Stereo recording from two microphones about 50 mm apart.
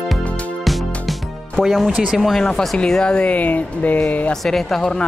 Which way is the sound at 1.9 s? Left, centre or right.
Right.